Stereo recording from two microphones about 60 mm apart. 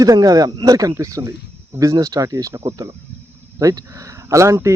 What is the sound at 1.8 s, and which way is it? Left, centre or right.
Speech, right.